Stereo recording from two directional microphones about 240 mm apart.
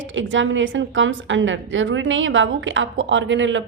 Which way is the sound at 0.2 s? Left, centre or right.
Right.